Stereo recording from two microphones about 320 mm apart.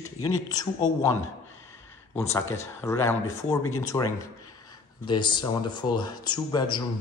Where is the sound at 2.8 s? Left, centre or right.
Centre.